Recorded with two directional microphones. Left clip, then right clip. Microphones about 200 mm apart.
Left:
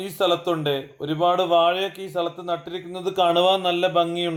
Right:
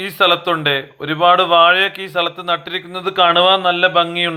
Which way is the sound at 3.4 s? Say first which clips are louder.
Right 7 dB; 5° left (ahead or behind).